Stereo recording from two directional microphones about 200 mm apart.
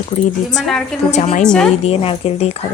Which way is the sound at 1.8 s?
30° left (ahead or behind).